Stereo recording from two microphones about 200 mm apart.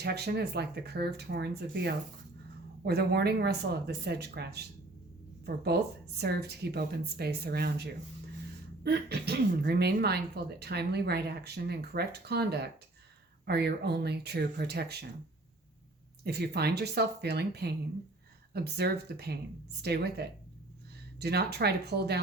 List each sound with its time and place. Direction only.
0.0 s speech: 55° right (ahead or behind)
16.2 s speech: 55° right (ahead or behind)